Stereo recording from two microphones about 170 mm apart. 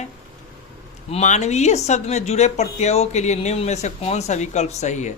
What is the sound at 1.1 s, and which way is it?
A woman's voice, 40° left (ahead or behind).